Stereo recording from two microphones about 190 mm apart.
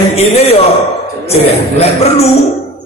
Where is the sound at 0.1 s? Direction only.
35° left (ahead or behind).